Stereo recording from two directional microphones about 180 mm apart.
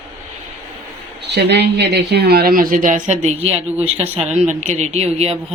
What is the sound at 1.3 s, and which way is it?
Speech, 70° right (ahead or behind).